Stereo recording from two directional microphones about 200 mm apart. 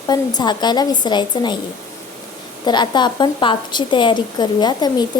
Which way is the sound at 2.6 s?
20° left (ahead or behind).